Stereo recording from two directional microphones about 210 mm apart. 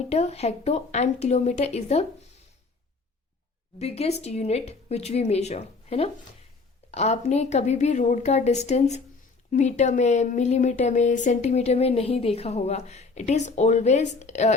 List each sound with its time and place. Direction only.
0.1 s speech: 30° left (ahead or behind)
3.8 s speech: 30° left (ahead or behind)